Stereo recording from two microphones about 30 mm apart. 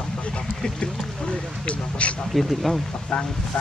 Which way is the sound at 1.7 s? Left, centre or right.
Left.